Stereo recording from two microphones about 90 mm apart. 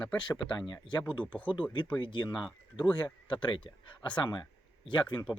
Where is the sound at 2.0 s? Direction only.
65° left (ahead or behind).